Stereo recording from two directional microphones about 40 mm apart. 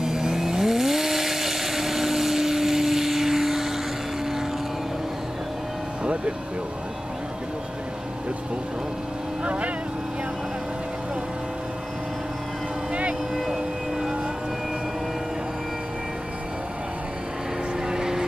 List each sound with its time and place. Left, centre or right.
0.0 s vehicle: centre
9.4 s boat: right
13.3 s vehicle: centre
17.8 s vehicle: centre